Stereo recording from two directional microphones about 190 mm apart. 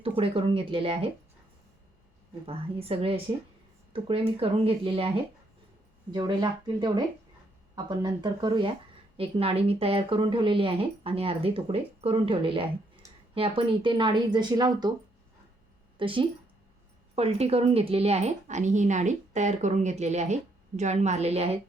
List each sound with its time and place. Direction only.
0.2 s a woman's voice: 30° right (ahead or behind)
2.5 s a woman's voice: 30° right (ahead or behind)
16.0 s a woman's voice: 25° right (ahead or behind)